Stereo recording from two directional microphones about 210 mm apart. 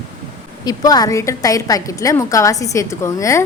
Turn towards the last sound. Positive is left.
turn(degrees=15)  # may be behind; listen again after turning